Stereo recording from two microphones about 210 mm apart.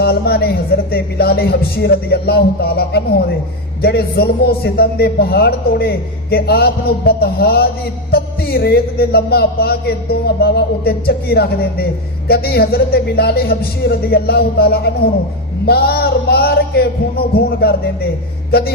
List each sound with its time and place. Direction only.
0.0 s a man's voice: 50° left (ahead or behind)